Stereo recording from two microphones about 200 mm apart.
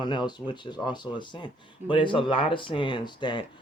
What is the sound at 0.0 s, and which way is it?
Speech, 20° left (ahead or behind).